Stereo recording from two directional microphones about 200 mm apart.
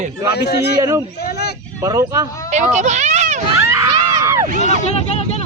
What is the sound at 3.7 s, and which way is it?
Crowd, 15° right (ahead or behind).